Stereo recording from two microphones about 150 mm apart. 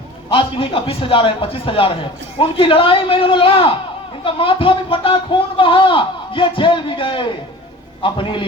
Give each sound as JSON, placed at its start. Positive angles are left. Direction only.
{"t": 0.3, "sound": "a man's voice", "side_deg": 35}